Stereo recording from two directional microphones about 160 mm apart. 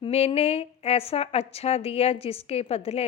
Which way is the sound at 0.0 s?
35° left (ahead or behind).